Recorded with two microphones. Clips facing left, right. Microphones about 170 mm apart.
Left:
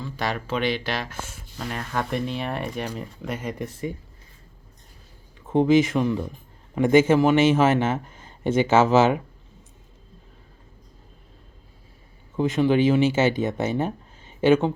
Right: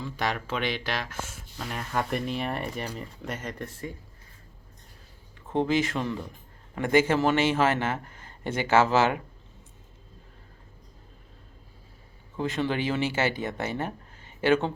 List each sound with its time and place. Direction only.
0.3 s speech: 5° left (ahead or behind)
3.4 s speech: 15° left (ahead or behind)
5.5 s a man's voice: 20° left (ahead or behind)
12.4 s a man's voice: 15° left (ahead or behind)